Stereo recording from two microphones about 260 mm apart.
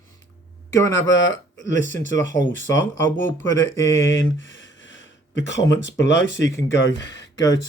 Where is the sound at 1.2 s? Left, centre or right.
Left.